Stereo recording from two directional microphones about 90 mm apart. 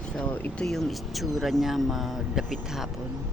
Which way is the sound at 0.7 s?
Centre (ahead or behind).